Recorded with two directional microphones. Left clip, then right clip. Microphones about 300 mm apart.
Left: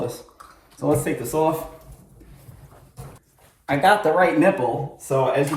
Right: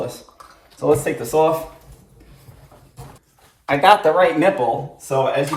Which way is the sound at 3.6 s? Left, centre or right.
Centre.